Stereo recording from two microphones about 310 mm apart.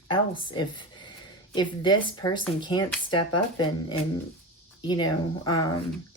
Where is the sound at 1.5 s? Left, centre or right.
Centre.